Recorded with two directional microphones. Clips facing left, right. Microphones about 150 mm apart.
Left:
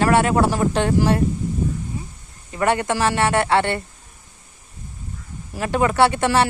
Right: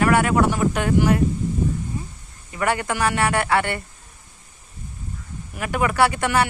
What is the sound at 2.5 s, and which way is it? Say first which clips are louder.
Speech: left 3 dB; 25° left (ahead or behind).